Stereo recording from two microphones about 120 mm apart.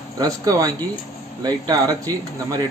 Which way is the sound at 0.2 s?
25° right (ahead or behind).